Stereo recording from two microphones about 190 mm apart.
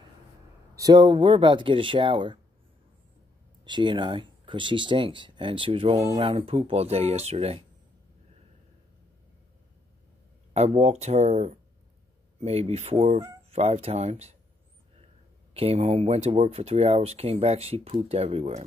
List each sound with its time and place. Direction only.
0.7 s speech: 20° right (ahead or behind)
3.6 s speech: 25° right (ahead or behind)
10.5 s speech: 35° right (ahead or behind)
15.5 s speech: 30° right (ahead or behind)